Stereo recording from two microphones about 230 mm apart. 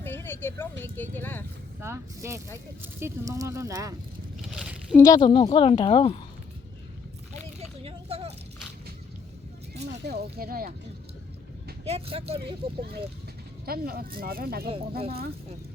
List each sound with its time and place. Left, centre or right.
0.0 s speech: centre
1.8 s speech: centre
4.4 s speech: centre
4.9 s a woman's voice: centre
7.8 s a sound: right
10.0 s speech: right
11.9 s speech: right
13.7 s speech: right
14.7 s speech: right